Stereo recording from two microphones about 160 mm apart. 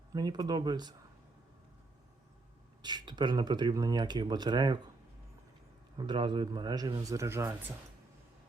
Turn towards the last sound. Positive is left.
turn(degrees=-15)  # may be behind; listen again after turning